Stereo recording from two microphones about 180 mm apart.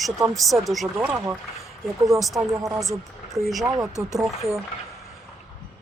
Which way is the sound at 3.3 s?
Centre (ahead or behind).